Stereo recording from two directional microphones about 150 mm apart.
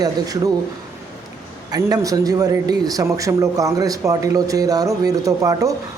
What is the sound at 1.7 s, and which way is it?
A man's voice, 25° right (ahead or behind).